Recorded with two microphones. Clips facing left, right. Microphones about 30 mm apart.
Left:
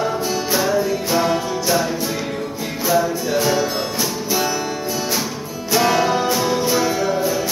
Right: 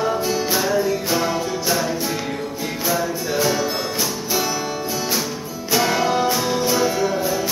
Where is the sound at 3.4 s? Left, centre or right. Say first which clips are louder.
Left 1 dB; centre.